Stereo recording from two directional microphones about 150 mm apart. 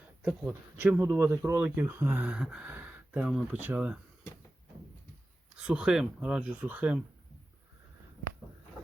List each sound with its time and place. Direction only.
0.8 s speech: 15° right (ahead or behind)
5.5 s speech: 5° right (ahead or behind)